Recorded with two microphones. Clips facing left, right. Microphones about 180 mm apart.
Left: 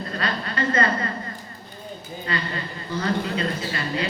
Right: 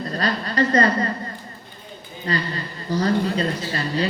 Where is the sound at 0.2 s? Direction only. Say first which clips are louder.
Right 5 dB; 35° right (ahead or behind).